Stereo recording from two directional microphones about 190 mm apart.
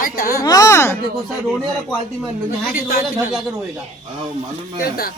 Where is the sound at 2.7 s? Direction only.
50° left (ahead or behind).